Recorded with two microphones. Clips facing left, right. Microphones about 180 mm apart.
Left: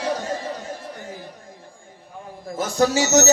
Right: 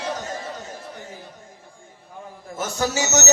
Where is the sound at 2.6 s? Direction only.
35° left (ahead or behind).